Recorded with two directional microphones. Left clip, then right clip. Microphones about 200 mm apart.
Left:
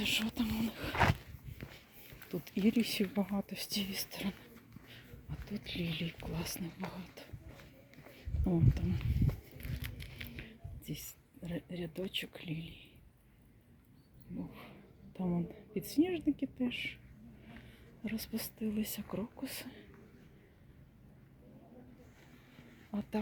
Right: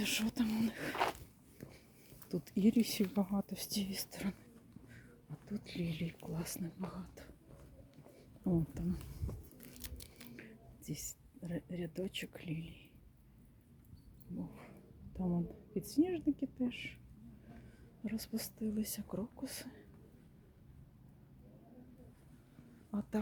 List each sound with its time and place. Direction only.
0.0 s speech: 15° right (ahead or behind)
2.3 s speech: 15° right (ahead or behind)
5.5 s speech: 5° right (ahead or behind)
8.4 s speech: 5° right (ahead or behind)
9.8 s scissors: 20° right (ahead or behind)
10.2 s speech: 5° right (ahead or behind)
14.3 s speech: centre (ahead or behind)
18.0 s speech: centre (ahead or behind)
22.9 s speech: 5° right (ahead or behind)